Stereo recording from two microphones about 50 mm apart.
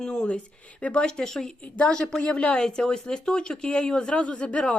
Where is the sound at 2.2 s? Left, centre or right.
Left.